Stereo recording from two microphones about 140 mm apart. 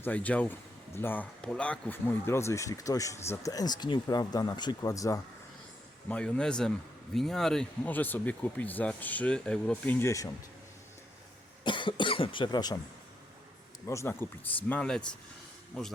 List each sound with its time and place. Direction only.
0.0 s a man's voice: 10° left (ahead or behind)
6.1 s a man's voice: 5° left (ahead or behind)
11.6 s speech: 35° left (ahead or behind)
13.8 s speech: 20° left (ahead or behind)
14.7 s a man's voice: 5° left (ahead or behind)